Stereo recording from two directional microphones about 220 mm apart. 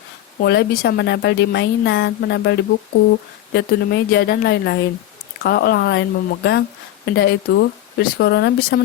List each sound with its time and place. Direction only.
0.3 s speech: 45° left (ahead or behind)